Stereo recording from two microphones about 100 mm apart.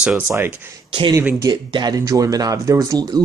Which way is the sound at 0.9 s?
55° right (ahead or behind).